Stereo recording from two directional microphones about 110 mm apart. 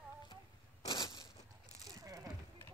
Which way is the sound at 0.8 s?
35° left (ahead or behind).